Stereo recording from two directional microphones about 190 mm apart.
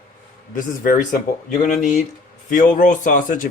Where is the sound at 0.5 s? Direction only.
45° left (ahead or behind).